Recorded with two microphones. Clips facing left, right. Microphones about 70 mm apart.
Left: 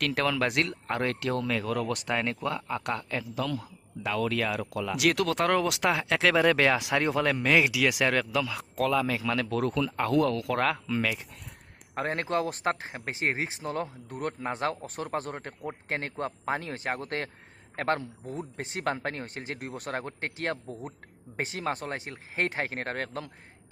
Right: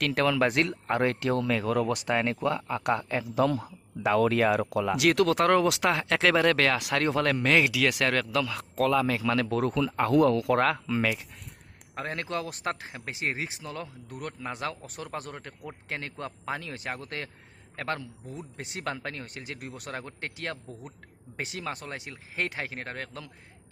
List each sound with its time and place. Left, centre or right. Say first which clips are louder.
0.0 s speech: right 3 dB; centre
2.9 s speech: right 8 dB; centre
3.4 s speech: right 6 dB; right
4.9 s speech: right 2 dB; centre
11.9 s speech: left 4 dB; left